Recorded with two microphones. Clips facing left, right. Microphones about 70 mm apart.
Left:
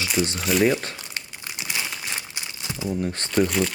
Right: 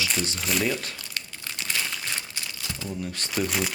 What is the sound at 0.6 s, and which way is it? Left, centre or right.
Crumpling, left.